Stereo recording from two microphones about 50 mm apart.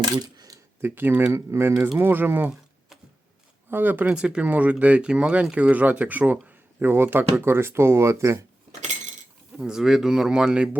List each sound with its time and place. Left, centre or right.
0.8 s speech: right
1.3 s speech: right
2.0 s speech: right
3.7 s speech: right
4.0 s speech: right
4.4 s speech: right
6.5 s a sound: right
7.3 s speech: right
9.6 s speech: centre